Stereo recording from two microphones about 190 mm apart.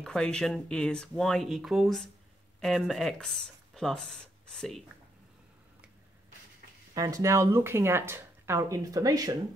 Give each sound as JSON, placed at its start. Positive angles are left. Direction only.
{"t": 0.0, "sound": "speech", "side_deg": 5}
{"t": 6.9, "sound": "speech", "side_deg": -20}